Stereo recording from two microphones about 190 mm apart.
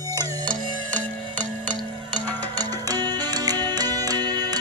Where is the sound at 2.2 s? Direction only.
10° left (ahead or behind).